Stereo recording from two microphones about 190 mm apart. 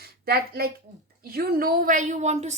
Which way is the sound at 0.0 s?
55° right (ahead or behind).